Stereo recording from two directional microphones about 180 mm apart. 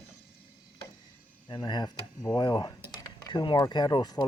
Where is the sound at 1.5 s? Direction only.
25° left (ahead or behind).